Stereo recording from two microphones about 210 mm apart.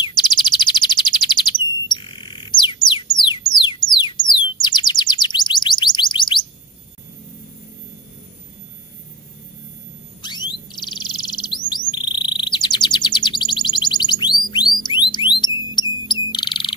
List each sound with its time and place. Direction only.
0.0 s chirp: 20° left (ahead or behind)
1.9 s music: 20° left (ahead or behind)
10.2 s bird: 20° left (ahead or behind)
14.8 s music: 20° left (ahead or behind)
15.4 s wind chime: 20° left (ahead or behind)
15.9 s bird: 20° left (ahead or behind)